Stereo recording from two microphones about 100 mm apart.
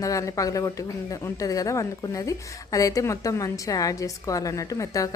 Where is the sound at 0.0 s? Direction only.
35° left (ahead or behind).